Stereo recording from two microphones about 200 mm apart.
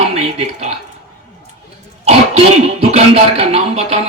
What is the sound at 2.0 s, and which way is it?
A man's voice, 30° right (ahead or behind).